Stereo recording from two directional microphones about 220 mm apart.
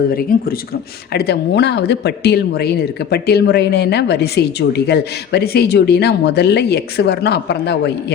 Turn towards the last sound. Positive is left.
turn(degrees=50)  # may be behind; listen again after turning